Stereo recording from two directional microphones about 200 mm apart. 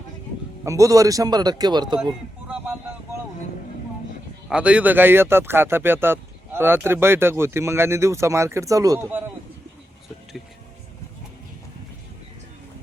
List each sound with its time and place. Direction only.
0.6 s a man's voice: 15° right (ahead or behind)
4.4 s speech: 5° right (ahead or behind)